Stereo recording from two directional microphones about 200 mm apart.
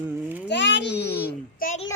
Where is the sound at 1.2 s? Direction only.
45° left (ahead or behind).